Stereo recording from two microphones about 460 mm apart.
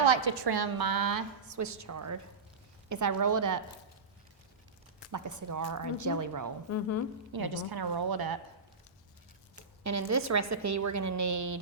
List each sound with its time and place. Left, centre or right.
0.0 s a woman's voice: right
5.1 s a woman's voice: right
6.7 s speech: left
7.3 s a woman's voice: right
9.8 s a woman's voice: right